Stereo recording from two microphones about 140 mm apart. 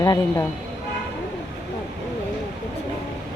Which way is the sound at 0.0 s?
25° left (ahead or behind).